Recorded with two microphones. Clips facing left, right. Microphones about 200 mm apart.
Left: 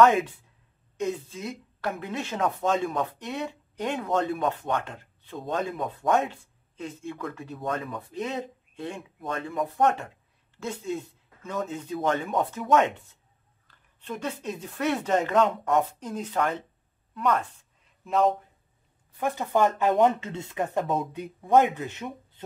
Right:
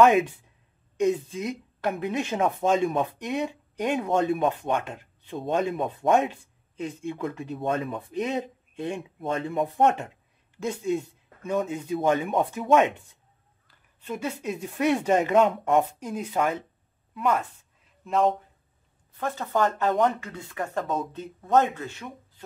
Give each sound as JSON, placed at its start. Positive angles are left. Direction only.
{"t": 0.9, "sound": "a woman's voice", "side_deg": -15}
{"t": 16.0, "sound": "a woman's voice", "side_deg": -10}
{"t": 19.1, "sound": "speech", "side_deg": 15}
{"t": 20.8, "sound": "a woman's voice", "side_deg": 0}
{"t": 21.1, "sound": "speech", "side_deg": 15}